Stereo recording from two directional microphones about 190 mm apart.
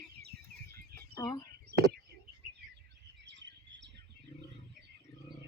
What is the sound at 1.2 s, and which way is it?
Speech, 20° left (ahead or behind).